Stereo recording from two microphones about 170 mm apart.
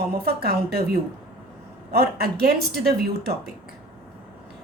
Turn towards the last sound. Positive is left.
turn(degrees=-70)  # may be behind; listen again after turning